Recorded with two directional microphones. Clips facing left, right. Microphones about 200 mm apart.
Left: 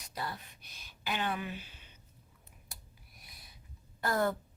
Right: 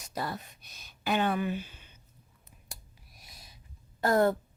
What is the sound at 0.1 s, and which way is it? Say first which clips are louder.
Speech: right 5 dB; 45° right (ahead or behind).